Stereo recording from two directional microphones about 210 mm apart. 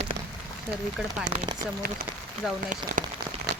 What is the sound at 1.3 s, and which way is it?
Speech, 25° right (ahead or behind).